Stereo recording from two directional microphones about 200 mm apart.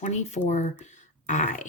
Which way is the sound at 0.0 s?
35° left (ahead or behind).